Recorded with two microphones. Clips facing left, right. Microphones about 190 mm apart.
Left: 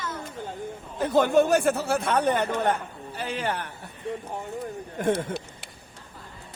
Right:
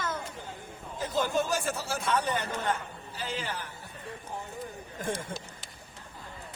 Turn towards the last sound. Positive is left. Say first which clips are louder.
# left 7 dB
turn(degrees=65)  # may be behind; listen again after turning